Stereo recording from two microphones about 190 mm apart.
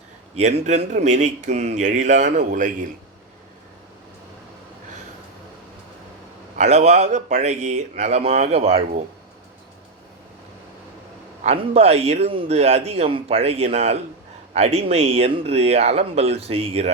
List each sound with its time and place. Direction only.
0.3 s speech: 35° right (ahead or behind)
6.6 s speech: 35° right (ahead or behind)
11.4 s speech: 35° right (ahead or behind)